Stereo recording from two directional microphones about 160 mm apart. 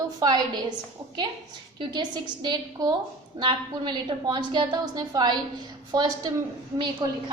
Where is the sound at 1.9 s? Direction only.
30° right (ahead or behind).